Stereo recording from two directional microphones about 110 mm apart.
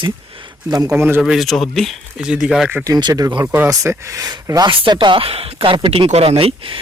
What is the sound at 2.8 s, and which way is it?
Speech, 35° right (ahead or behind).